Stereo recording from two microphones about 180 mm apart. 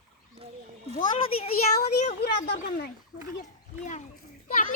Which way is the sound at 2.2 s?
60° left (ahead or behind).